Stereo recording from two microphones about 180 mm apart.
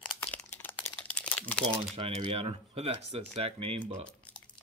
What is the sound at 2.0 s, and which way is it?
Speech, 30° right (ahead or behind).